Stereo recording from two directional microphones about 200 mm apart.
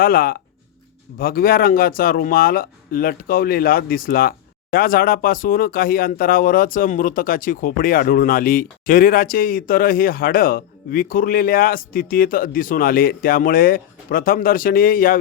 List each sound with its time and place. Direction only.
0.0 s speech: 45° left (ahead or behind)